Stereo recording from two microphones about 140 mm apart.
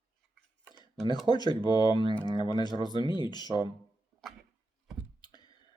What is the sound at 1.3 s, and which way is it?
Speech, 30° left (ahead or behind).